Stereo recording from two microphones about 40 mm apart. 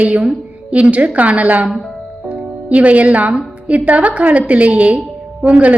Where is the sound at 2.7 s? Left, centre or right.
Right.